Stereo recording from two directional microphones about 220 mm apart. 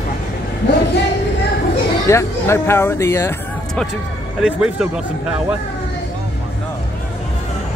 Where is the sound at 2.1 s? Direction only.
10° left (ahead or behind).